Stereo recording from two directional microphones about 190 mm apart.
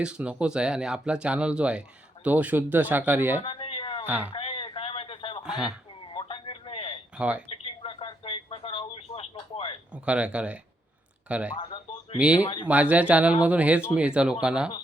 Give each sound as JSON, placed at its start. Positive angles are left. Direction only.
{"t": 0.0, "sound": "speech", "side_deg": -5}
{"t": 3.4, "sound": "a sound", "side_deg": 30}
{"t": 4.0, "sound": "speech", "side_deg": -10}
{"t": 4.3, "sound": "a sound", "side_deg": 30}
{"t": 5.4, "sound": "speech", "side_deg": -5}
{"t": 6.1, "sound": "a sound", "side_deg": 25}
{"t": 7.2, "sound": "speech", "side_deg": -5}
{"t": 7.5, "sound": "radio", "side_deg": 30}
{"t": 9.9, "sound": "speech", "side_deg": -5}